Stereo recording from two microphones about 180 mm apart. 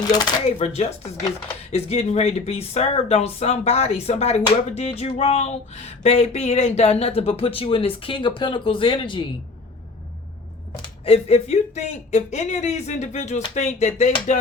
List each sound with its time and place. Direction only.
0.1 s speech: 20° left (ahead or behind)
0.4 s speech: 35° left (ahead or behind)
11.0 s speech: 35° left (ahead or behind)